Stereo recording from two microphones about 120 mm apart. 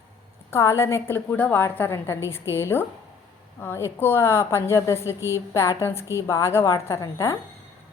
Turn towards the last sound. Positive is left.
turn(degrees=25)  # may be behind; listen again after turning